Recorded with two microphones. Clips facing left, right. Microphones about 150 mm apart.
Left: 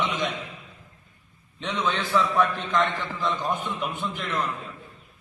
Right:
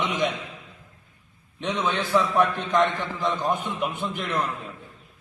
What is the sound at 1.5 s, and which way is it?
A man's voice, 15° right (ahead or behind).